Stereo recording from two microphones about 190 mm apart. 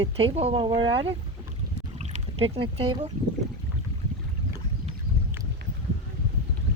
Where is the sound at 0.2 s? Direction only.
30° right (ahead or behind).